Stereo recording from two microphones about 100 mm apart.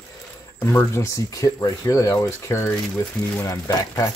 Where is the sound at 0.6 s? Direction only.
25° left (ahead or behind).